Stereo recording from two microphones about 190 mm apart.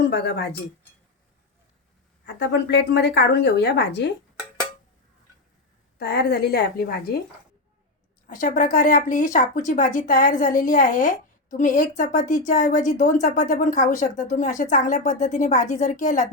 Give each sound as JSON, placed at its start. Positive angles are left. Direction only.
{"t": 0.0, "sound": "a woman's voice", "side_deg": 65}
{"t": 2.2, "sound": "a woman's voice", "side_deg": 65}
{"t": 6.0, "sound": "a woman's voice", "side_deg": 55}
{"t": 8.3, "sound": "speech", "side_deg": 45}